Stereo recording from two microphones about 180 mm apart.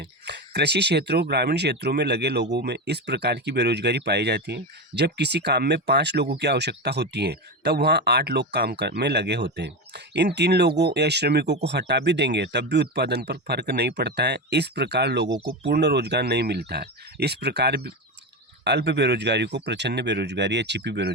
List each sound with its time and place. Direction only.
0.0 s speech: 70° right (ahead or behind)